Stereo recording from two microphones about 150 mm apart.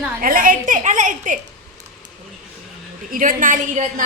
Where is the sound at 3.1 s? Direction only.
65° right (ahead or behind).